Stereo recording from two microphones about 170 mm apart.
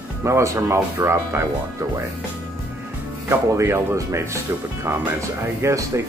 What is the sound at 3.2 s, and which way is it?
Speech, 15° right (ahead or behind).